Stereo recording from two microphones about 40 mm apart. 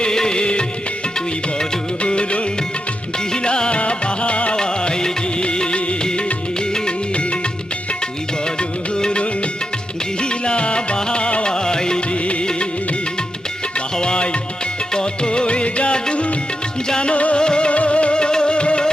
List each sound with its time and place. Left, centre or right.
0.0 s music: centre
2.0 s music: left
6.7 s music of bollywood: left
8.4 s music: left
12.1 s music: left
13.9 s music: left
17.7 s music: left